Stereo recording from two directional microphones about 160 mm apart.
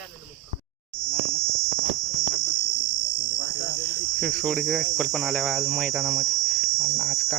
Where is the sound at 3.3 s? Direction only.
45° right (ahead or behind).